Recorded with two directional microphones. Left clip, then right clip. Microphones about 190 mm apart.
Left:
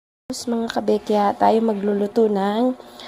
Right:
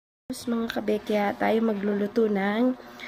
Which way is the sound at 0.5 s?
15° left (ahead or behind).